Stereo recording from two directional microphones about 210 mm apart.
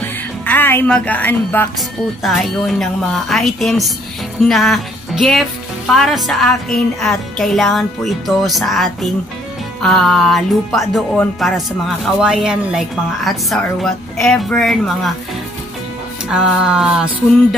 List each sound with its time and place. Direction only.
0.5 s a woman's voice: 10° left (ahead or behind)
4.5 s music: centre (ahead or behind)
5.9 s speech: centre (ahead or behind)
16.3 s speech: 5° right (ahead or behind)